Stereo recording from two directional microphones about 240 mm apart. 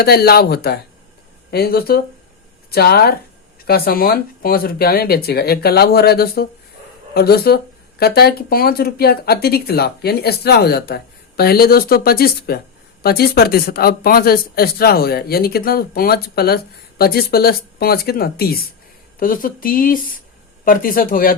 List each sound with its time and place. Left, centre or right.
0.0 s speech: left